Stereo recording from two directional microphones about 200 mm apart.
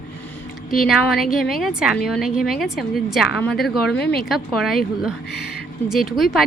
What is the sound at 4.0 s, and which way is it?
Speech, 55° left (ahead or behind).